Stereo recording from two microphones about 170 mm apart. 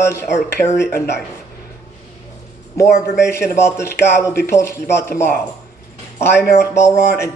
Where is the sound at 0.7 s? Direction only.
75° left (ahead or behind).